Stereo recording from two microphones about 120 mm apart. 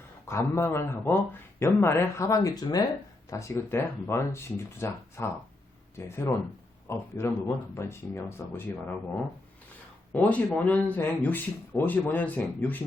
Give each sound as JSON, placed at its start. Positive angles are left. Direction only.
{"t": 0.3, "sound": "speech", "side_deg": 20}
{"t": 10.1, "sound": "speech", "side_deg": 15}